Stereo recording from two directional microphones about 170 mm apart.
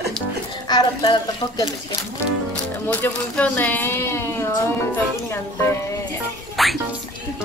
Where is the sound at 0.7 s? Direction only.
25° left (ahead or behind).